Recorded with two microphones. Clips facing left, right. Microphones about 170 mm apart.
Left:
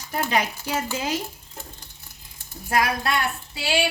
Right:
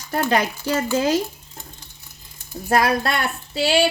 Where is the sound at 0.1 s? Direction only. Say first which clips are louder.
Right 4 dB; 70° right (ahead or behind).